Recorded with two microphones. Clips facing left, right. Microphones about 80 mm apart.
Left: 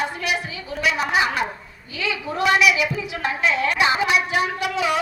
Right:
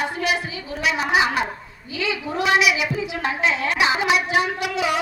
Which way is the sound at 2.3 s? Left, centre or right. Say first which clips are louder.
Left 1 dB; right.